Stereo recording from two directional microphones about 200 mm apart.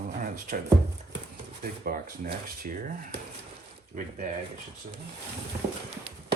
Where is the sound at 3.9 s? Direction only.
40° right (ahead or behind).